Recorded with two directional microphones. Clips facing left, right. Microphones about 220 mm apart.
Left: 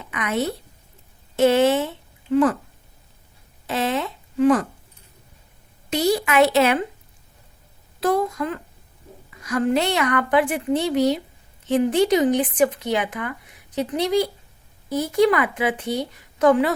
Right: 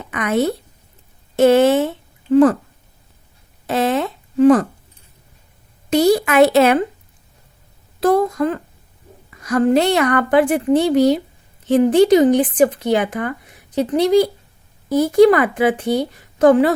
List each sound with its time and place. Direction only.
0.0 s a woman's voice: 45° right (ahead or behind)
3.7 s a sound: 45° right (ahead or behind)
5.9 s a woman's voice: 40° right (ahead or behind)
8.0 s a woman's voice: 40° right (ahead or behind)